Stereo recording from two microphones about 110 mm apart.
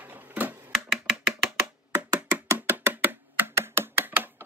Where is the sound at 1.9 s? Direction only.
20° right (ahead or behind).